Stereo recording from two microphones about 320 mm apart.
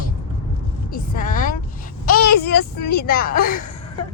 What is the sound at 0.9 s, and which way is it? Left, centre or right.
Speech, left.